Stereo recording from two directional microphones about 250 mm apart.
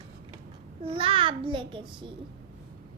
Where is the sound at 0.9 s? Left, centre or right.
Right.